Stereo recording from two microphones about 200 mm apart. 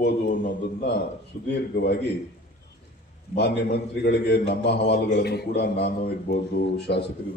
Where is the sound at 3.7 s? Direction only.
55° left (ahead or behind).